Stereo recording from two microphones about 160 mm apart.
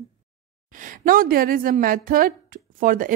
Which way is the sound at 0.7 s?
55° right (ahead or behind).